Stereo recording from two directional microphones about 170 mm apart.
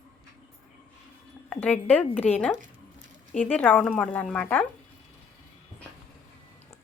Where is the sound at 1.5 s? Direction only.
10° left (ahead or behind).